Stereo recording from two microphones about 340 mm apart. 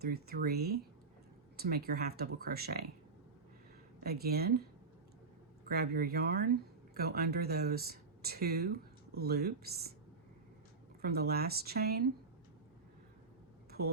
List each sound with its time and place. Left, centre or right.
0.0 s speech: right
4.0 s speech: right
5.6 s speech: right
11.0 s speech: right
13.7 s a sound: right